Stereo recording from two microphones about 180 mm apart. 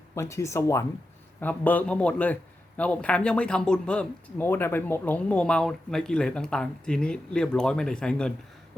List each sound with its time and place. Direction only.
0.1 s a man's voice: 15° left (ahead or behind)